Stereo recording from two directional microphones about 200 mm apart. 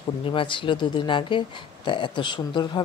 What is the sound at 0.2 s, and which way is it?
Speech, 25° left (ahead or behind).